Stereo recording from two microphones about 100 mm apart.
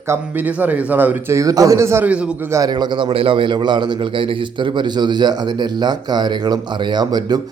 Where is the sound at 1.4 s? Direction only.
35° right (ahead or behind).